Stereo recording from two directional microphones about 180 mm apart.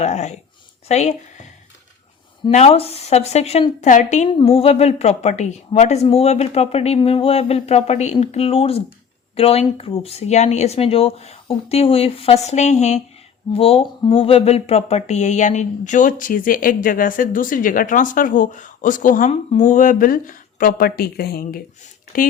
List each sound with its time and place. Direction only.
0.0 s a woman's voice: 40° left (ahead or behind)
2.5 s a woman's voice: 35° left (ahead or behind)
4.4 s a woman's voice: 30° left (ahead or behind); by 21.6 s 55° left (ahead or behind)